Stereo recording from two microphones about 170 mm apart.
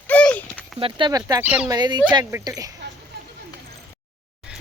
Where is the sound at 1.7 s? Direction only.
25° right (ahead or behind).